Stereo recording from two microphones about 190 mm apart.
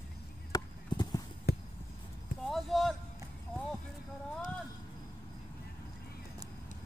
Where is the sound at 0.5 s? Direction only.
20° left (ahead or behind).